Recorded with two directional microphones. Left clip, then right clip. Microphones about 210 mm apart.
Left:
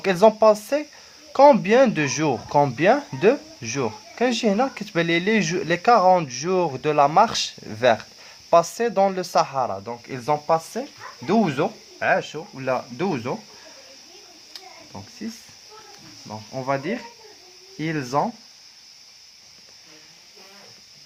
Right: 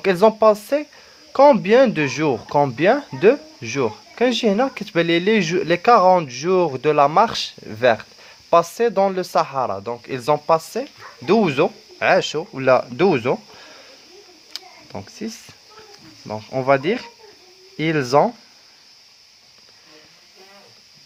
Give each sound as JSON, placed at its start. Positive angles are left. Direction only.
{"t": 0.0, "sound": "speech", "side_deg": -15}
{"t": 11.9, "sound": "speech", "side_deg": -45}
{"t": 14.9, "sound": "speech", "side_deg": -50}
{"t": 16.2, "sound": "speech", "side_deg": -50}